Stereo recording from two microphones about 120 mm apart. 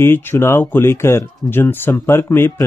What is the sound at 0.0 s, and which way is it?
Speech, 20° left (ahead or behind).